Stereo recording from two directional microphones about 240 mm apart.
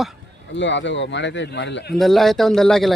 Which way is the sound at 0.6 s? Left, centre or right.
Left.